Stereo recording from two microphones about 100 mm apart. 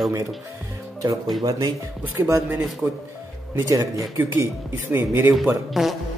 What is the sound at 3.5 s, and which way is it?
Speech, 35° right (ahead or behind).